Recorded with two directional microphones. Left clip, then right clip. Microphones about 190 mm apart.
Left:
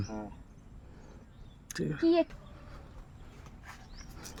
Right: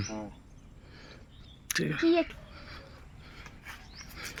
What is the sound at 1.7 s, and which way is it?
Speech, 10° left (ahead or behind).